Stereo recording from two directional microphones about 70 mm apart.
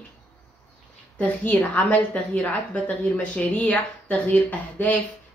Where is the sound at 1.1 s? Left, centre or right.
Centre.